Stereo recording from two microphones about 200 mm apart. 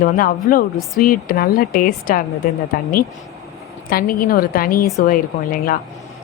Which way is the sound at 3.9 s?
50° left (ahead or behind).